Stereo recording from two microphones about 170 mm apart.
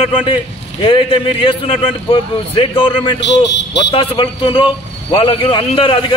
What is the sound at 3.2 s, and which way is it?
Speech, 90° left.